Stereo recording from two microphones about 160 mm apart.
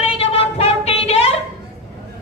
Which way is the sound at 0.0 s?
40° left (ahead or behind).